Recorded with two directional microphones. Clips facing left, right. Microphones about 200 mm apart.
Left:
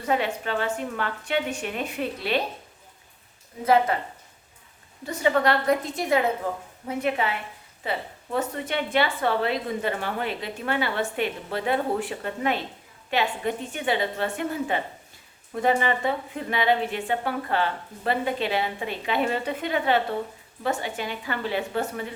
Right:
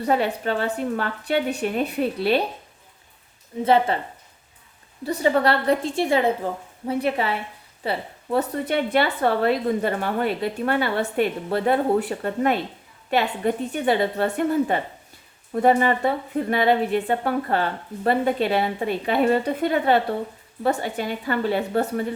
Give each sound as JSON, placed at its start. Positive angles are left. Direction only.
{"t": 0.0, "sound": "a woman's voice", "side_deg": -35}
{"t": 3.6, "sound": "a woman's voice", "side_deg": -25}
{"t": 5.0, "sound": "a woman's voice", "side_deg": -35}